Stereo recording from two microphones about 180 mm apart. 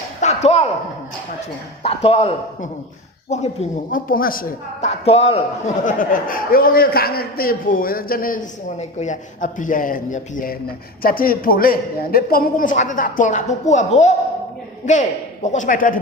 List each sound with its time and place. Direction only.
0.2 s a sound: 40° left (ahead or behind)
1.8 s a man's voice: 30° left (ahead or behind)
3.9 s a man's voice: 50° left (ahead or behind)
4.8 s a man's voice: 35° left (ahead or behind)